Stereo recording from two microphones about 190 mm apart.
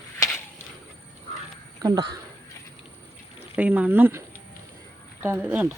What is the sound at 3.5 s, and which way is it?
Speech, 5° right (ahead or behind).